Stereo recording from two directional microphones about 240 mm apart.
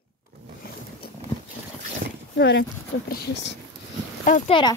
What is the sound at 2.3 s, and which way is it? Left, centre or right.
Speech, left.